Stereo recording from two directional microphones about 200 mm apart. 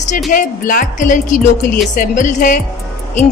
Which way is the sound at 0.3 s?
45° left (ahead or behind).